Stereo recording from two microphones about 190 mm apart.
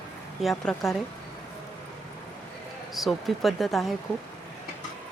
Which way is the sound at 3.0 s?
Centre (ahead or behind).